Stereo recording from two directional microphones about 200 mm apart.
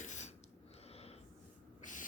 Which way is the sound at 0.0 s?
35° left (ahead or behind).